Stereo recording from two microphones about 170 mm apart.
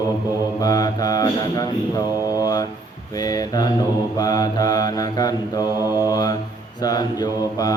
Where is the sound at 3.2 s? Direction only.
20° left (ahead or behind).